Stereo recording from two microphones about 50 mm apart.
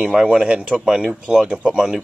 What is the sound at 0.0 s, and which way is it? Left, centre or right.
Speech, centre.